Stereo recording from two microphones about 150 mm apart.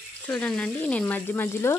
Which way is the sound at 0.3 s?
5° left (ahead or behind).